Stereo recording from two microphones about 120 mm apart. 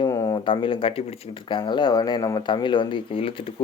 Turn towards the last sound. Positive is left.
turn(degrees=50)  # may be behind; listen again after turning